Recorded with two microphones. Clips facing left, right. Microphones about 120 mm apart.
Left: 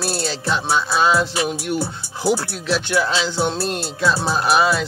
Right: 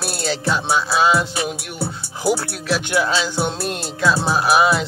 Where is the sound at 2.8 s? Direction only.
15° right (ahead or behind).